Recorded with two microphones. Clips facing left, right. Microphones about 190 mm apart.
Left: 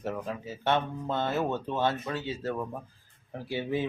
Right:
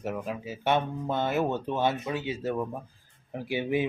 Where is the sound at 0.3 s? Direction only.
15° right (ahead or behind).